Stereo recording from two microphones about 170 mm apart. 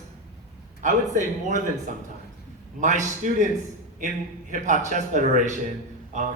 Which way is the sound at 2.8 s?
45° right (ahead or behind).